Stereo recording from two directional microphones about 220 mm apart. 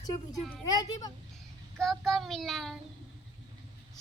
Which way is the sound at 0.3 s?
Centre (ahead or behind).